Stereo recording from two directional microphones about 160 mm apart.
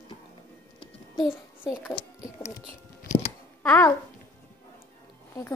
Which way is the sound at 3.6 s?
15° left (ahead or behind).